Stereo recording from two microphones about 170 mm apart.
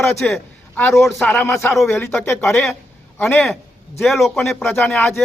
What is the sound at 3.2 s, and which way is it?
A man's voice, centre (ahead or behind).